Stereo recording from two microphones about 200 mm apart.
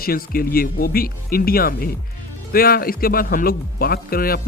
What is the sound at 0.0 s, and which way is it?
Speech, 50° left (ahead or behind).